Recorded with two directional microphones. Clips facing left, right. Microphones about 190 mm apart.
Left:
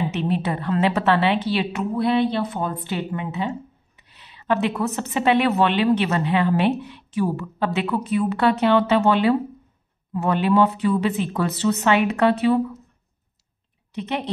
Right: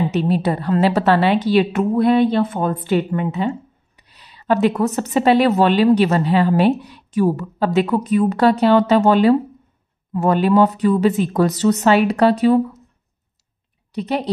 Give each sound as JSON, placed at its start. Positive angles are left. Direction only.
{"t": 0.1, "sound": "a woman's voice", "side_deg": -35}
{"t": 4.1, "sound": "a woman's voice", "side_deg": -40}
{"t": 13.9, "sound": "a woman's voice", "side_deg": -35}